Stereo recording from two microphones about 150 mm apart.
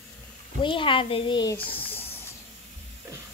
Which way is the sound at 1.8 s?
15° left (ahead or behind).